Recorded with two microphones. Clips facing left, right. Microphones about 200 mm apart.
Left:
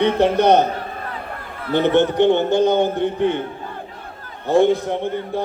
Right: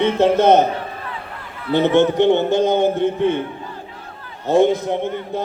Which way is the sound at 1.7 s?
20° right (ahead or behind).